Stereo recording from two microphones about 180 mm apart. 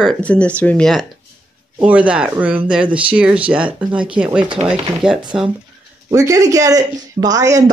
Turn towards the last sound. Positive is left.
turn(degrees=-20)  # may be behind; listen again after turning